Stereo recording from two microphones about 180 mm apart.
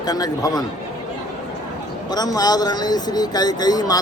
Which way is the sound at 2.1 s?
20° left (ahead or behind).